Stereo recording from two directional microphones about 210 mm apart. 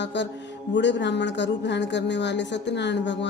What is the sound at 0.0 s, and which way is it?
Speech, 55° left (ahead or behind).